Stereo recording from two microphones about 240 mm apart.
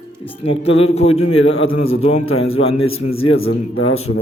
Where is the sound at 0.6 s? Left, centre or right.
Left.